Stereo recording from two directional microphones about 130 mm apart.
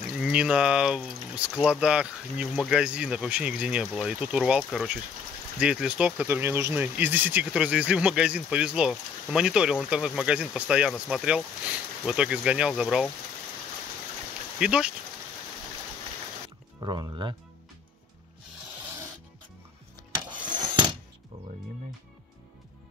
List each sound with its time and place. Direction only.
0.1 s speech: 5° right (ahead or behind)
4.6 s speech: 5° left (ahead or behind)
5.6 s speech: 10° right (ahead or behind)
14.6 s speech: 5° right (ahead or behind)
16.4 s music: 35° right (ahead or behind)
20.2 s rub: 35° right (ahead or behind)